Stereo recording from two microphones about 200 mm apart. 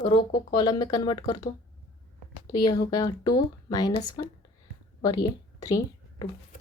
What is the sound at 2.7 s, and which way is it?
Speech, 20° left (ahead or behind).